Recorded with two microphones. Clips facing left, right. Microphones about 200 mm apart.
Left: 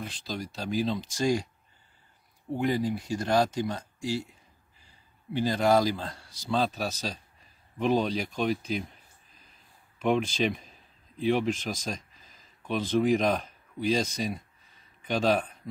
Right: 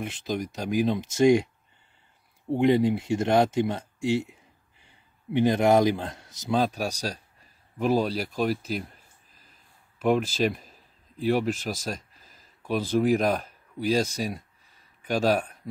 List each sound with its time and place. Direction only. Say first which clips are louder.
0.0 s speech: right 6 dB; 20° right (ahead or behind)
2.5 s a man's voice: right 6 dB; 25° right (ahead or behind); by 8.9 s centre (ahead or behind)
9.9 s a man's voice: right 2 dB; 5° right (ahead or behind)